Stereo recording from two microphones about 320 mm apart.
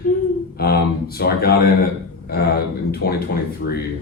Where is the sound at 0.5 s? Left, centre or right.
Left.